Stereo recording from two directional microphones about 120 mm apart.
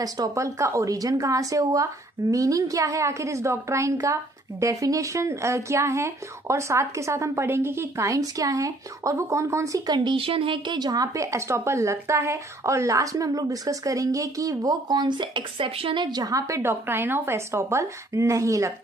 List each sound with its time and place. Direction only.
0.0 s a woman's voice: 30° right (ahead or behind)
9.8 s a woman's voice: 40° right (ahead or behind)